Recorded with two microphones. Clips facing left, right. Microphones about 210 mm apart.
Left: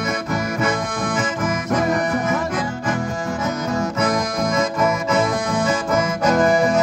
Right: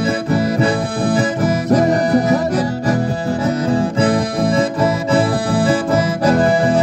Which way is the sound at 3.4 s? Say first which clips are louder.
Right 6 dB; 30° right (ahead or behind).